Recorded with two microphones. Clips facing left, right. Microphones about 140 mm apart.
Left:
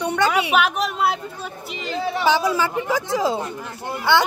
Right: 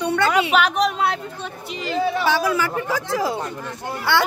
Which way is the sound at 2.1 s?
20° left (ahead or behind).